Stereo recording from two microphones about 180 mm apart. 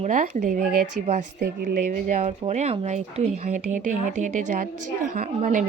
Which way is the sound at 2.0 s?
40° right (ahead or behind).